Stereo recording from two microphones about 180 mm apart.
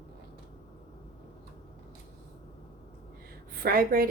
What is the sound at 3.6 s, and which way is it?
Speech, 55° right (ahead or behind).